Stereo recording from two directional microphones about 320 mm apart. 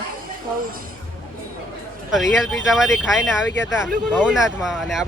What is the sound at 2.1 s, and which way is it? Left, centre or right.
Speech, centre.